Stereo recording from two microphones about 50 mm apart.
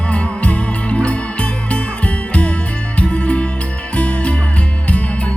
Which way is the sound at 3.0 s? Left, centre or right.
Left.